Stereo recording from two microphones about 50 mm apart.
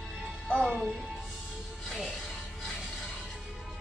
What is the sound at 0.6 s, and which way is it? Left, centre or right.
Music, centre.